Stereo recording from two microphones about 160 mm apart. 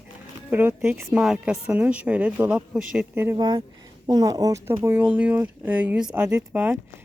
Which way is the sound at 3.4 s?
30° right (ahead or behind).